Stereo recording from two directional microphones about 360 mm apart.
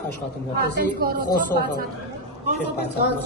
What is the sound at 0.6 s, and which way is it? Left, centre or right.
Speech, right.